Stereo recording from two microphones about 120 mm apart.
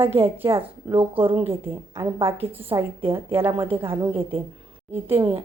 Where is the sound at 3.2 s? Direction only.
50° right (ahead or behind).